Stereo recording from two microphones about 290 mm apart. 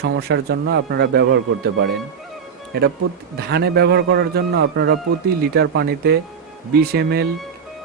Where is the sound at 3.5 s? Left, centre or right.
Right.